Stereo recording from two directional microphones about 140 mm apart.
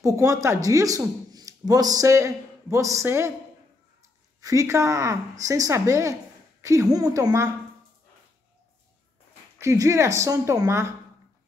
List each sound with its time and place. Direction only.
0.0 s speech: 20° right (ahead or behind)
4.4 s speech: 25° right (ahead or behind)
9.6 s speech: 20° right (ahead or behind)